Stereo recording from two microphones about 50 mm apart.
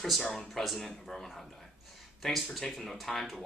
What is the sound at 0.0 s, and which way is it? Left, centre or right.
A man's voice, centre.